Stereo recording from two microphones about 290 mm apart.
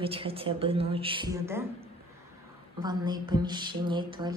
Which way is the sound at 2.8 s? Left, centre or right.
Centre.